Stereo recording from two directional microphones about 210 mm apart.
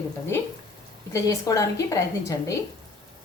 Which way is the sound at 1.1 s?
15° left (ahead or behind).